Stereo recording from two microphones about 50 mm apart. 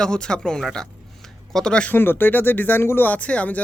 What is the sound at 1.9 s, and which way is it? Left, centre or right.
Speech, left.